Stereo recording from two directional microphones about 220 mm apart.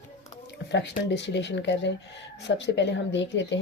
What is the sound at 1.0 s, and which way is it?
Speech, 50° left (ahead or behind).